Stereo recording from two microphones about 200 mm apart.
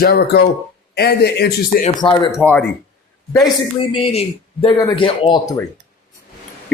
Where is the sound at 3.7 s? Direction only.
25° left (ahead or behind).